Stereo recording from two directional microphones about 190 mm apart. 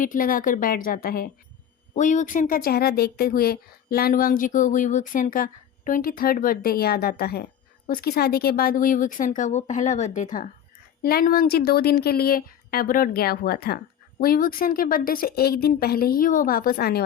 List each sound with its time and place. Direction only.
0.0 s speech: 45° left (ahead or behind)